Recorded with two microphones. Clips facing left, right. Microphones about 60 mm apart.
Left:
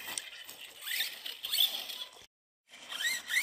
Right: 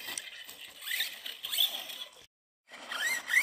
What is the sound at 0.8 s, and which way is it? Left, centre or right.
Zipper, centre.